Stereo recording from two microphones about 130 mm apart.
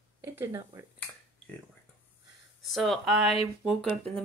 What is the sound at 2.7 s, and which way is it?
Speech, centre (ahead or behind).